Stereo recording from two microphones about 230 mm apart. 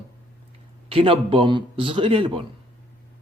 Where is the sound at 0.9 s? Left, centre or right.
Right.